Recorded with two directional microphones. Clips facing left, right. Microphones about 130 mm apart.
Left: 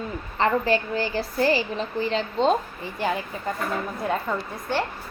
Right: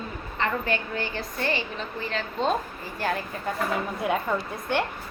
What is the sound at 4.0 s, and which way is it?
Speech, 10° right (ahead or behind).